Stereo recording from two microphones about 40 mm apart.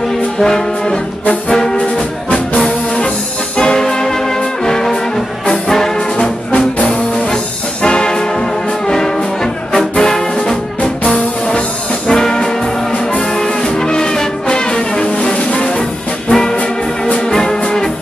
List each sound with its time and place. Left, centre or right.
0.4 s brass instrument: centre
3.5 s music: centre
4.6 s brass instrument: centre
7.8 s music: left
8.8 s brass instrument: centre
13.4 s music: centre
16.3 s brass instrument: centre
17.3 s music: centre